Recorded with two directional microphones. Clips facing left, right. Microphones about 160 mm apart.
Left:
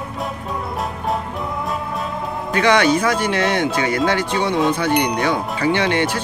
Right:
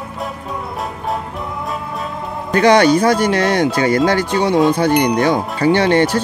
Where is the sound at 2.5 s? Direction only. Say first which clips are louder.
Right 5 dB; 40° right (ahead or behind).